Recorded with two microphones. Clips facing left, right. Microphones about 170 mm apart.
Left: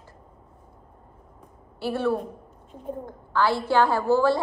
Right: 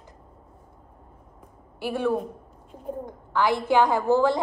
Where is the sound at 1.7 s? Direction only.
15° right (ahead or behind).